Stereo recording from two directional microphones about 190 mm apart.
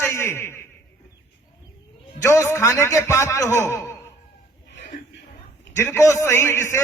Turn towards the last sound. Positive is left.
turn(degrees=15)  # may be behind; listen again after turning